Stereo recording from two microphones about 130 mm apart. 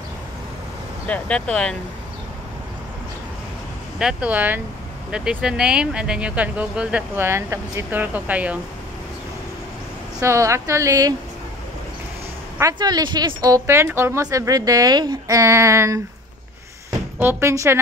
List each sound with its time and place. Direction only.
1.0 s speech: 10° left (ahead or behind)
4.0 s speech: 10° right (ahead or behind)
10.1 s speech: 25° right (ahead or behind)
12.7 s speech: 35° right (ahead or behind)
17.2 s speech: 15° right (ahead or behind)